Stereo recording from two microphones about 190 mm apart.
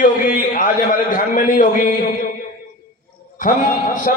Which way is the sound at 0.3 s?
45° left (ahead or behind).